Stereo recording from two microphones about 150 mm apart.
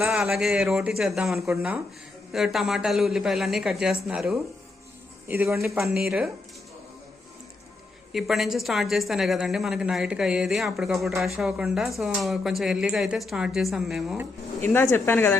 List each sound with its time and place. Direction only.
0.1 s a woman's voice: 5° right (ahead or behind)
5.3 s speech: 15° right (ahead or behind)
5.7 s a woman's voice: centre (ahead or behind)
8.1 s a woman's voice: centre (ahead or behind)
14.6 s speech: 15° left (ahead or behind)